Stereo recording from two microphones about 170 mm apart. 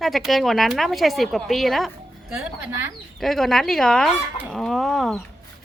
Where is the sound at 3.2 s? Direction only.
Centre (ahead or behind).